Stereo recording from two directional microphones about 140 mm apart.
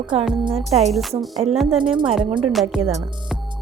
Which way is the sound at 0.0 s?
35° right (ahead or behind).